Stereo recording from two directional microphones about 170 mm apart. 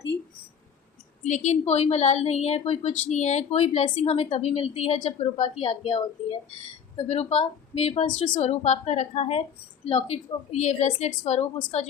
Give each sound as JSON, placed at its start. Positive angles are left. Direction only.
{"t": 1.2, "sound": "a woman's voice", "side_deg": 45}